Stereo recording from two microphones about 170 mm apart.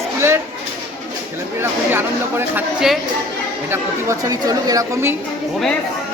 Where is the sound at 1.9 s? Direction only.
15° right (ahead or behind).